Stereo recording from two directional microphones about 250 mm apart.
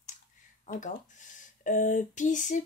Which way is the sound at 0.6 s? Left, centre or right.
Left.